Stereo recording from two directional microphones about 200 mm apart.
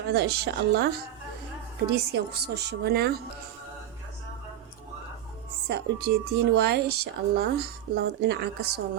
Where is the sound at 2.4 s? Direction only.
55° right (ahead or behind).